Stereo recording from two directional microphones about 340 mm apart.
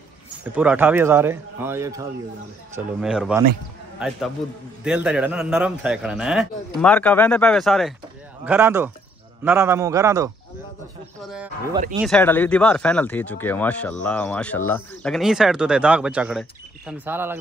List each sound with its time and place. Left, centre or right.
0.6 s a man's voice: centre